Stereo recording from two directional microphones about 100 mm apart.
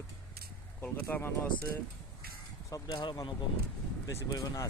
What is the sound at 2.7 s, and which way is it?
Speech, 40° left (ahead or behind).